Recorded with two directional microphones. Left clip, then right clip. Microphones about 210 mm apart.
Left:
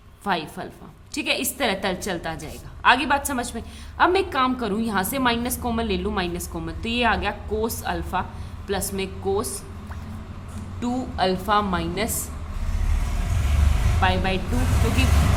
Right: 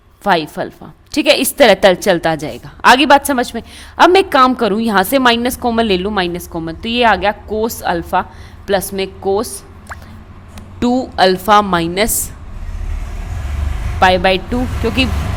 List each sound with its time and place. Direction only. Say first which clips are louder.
0.3 s a woman's voice: right 12 dB; 40° right (ahead or behind)
10.8 s a woman's voice: right 12 dB; 35° right (ahead or behind)
14.0 s a woman's voice: right 13 dB; 45° right (ahead or behind)